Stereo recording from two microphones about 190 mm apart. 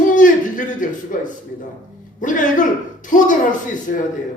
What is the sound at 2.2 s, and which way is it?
Speech, 45° left (ahead or behind).